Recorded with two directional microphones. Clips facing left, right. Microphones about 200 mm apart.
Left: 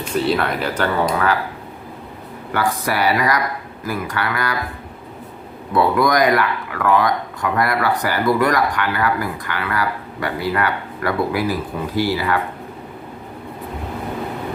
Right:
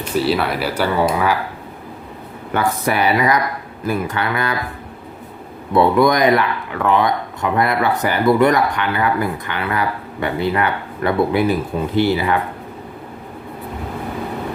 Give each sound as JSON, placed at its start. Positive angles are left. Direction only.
{"t": 0.1, "sound": "speech", "side_deg": -5}
{"t": 2.5, "sound": "speech", "side_deg": -20}
{"t": 5.7, "sound": "speech", "side_deg": -25}